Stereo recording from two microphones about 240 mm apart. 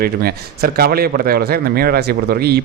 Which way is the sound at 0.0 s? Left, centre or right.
Right.